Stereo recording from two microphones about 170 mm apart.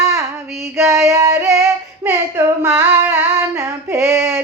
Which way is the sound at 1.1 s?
20° right (ahead or behind).